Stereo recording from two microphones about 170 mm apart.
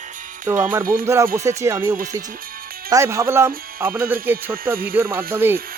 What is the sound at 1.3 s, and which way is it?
Speech, 15° right (ahead or behind).